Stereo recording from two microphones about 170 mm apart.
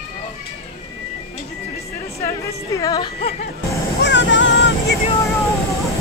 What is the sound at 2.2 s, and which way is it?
Speech, 20° left (ahead or behind).